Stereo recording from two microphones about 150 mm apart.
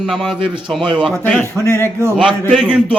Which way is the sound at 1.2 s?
15° left (ahead or behind).